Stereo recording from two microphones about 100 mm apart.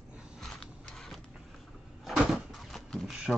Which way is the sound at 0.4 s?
5° left (ahead or behind).